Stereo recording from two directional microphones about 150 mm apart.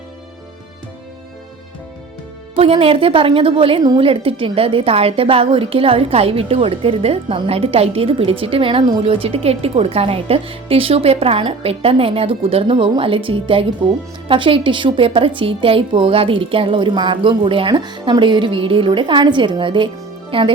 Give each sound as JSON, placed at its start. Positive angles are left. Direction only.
{"t": 2.6, "sound": "a woman's voice", "side_deg": -40}